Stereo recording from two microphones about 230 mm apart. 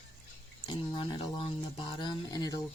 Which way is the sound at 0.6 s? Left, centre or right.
Left.